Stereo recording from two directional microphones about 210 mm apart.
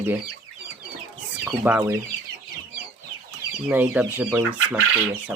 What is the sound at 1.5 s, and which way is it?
Speech, 5° right (ahead or behind).